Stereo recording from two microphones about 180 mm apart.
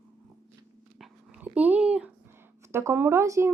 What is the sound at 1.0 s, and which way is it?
Dog, 5° right (ahead or behind).